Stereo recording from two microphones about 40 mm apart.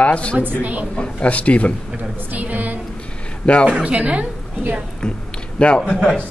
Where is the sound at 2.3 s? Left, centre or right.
Right.